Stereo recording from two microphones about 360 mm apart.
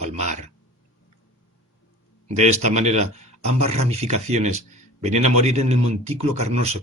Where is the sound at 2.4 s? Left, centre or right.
Centre.